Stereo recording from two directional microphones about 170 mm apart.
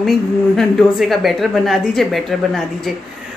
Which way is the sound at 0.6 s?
Centre (ahead or behind).